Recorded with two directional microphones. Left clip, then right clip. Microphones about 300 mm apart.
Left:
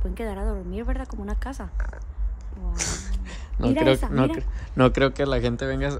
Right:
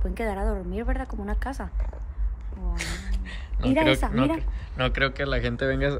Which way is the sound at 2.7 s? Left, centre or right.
Left.